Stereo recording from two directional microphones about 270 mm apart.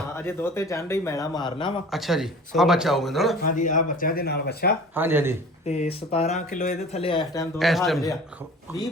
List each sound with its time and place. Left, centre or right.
0.2 s a man's voice: centre
1.9 s speech: centre
3.5 s speech: left
4.9 s speech: centre
5.6 s speech: left
7.6 s speech: centre